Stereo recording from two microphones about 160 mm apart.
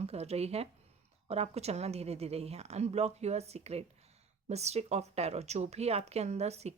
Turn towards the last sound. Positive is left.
turn(degrees=-40)  # may be behind; listen again after turning